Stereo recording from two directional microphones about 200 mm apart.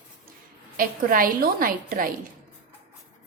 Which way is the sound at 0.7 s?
45° right (ahead or behind).